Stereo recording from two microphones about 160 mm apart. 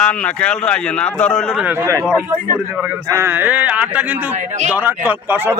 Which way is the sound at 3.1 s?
15° right (ahead or behind).